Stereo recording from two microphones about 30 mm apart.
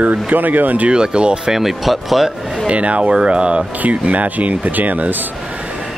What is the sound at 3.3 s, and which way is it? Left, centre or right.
Speech, right.